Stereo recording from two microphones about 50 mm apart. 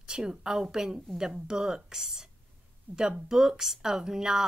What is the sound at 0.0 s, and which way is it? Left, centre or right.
Speech, centre.